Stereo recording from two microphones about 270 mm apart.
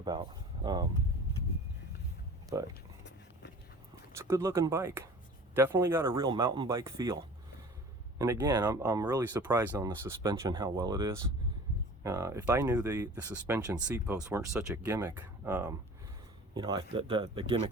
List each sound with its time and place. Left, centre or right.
0.0 s speech: centre
2.5 s speech: centre
4.1 s speech: centre
8.2 s speech: centre